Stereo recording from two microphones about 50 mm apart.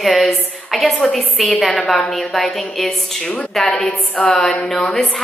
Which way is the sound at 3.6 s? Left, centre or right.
Centre.